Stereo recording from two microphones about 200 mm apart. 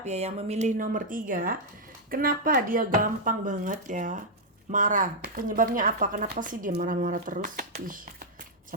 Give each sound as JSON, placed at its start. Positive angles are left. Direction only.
{"t": 0.0, "sound": "speech", "side_deg": -35}